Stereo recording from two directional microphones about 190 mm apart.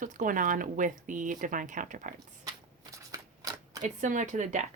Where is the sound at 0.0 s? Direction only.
45° right (ahead or behind).